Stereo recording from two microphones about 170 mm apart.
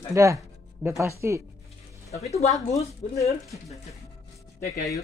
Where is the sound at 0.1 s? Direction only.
20° right (ahead or behind).